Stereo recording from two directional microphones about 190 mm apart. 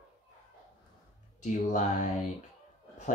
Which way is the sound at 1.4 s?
40° left (ahead or behind).